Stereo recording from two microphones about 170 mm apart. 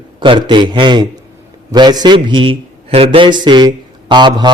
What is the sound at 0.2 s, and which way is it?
A man's voice, 25° right (ahead or behind).